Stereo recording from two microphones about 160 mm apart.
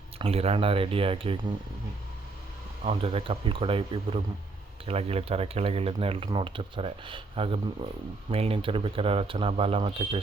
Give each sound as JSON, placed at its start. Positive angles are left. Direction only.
{"t": 0.2, "sound": "speech", "side_deg": -40}
{"t": 2.8, "sound": "speech", "side_deg": -35}